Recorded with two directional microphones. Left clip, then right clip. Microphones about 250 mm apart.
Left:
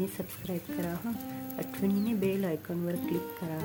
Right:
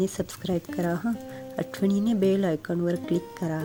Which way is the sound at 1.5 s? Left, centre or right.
Right.